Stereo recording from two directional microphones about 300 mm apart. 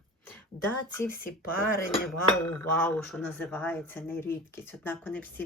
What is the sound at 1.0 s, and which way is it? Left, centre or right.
Speech, left.